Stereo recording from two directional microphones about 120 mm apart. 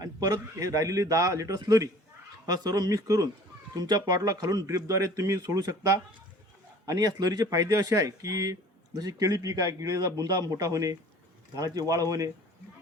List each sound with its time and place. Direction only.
0.0 s a man's voice: 30° right (ahead or behind)